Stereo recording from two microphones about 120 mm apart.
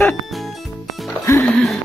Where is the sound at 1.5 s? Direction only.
5° left (ahead or behind).